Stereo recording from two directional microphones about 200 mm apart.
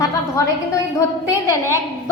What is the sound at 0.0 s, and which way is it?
A woman's voice, 15° left (ahead or behind).